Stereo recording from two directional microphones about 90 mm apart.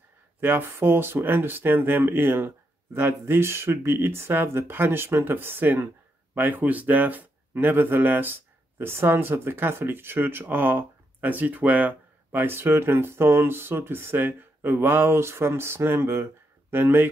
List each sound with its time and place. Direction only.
0.4 s speech: 25° right (ahead or behind)